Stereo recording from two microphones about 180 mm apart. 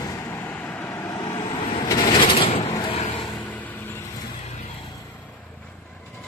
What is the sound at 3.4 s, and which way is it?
Vehicle, 10° left (ahead or behind).